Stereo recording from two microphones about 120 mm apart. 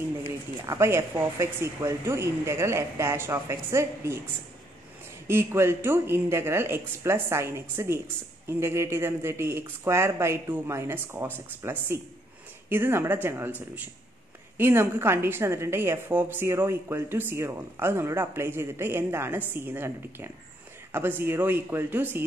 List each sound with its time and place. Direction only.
0.7 s a woman's voice: 25° right (ahead or behind)
5.3 s a woman's voice: 20° right (ahead or behind)
14.6 s a woman's voice: 20° right (ahead or behind)